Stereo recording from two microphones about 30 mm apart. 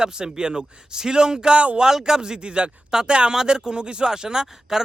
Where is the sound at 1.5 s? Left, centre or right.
Right.